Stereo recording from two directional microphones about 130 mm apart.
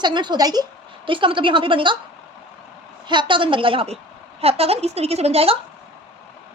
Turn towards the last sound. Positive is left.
turn(degrees=-50)  # may be behind; listen again after turning